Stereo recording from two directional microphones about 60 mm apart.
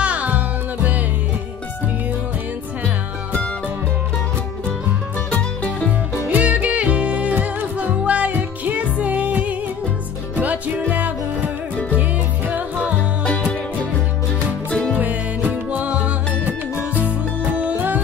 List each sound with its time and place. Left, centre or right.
0.0 s music: right
5.3 s music: left
6.3 s music: right
13.2 s music: centre
14.7 s music: left
15.0 s music: right
17.6 s music: right